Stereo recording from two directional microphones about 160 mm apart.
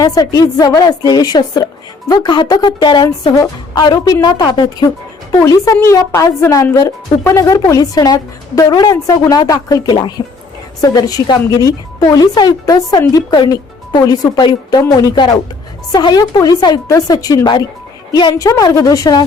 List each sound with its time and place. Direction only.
0.0 s a woman's voice: 25° left (ahead or behind)